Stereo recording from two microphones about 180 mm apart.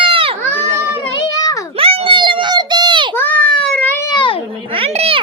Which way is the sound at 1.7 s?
30° right (ahead or behind).